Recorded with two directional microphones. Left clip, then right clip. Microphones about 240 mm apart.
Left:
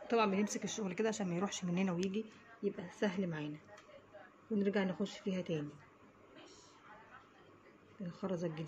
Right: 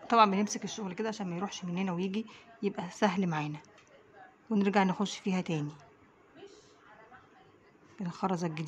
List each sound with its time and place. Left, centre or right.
0.1 s speech: right; by 2.0 s centre
2.0 s a woman's voice: right
4.6 s a woman's voice: right
8.0 s a woman's voice: right